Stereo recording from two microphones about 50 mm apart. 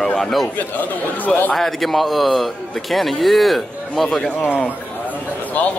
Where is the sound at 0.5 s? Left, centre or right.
Left.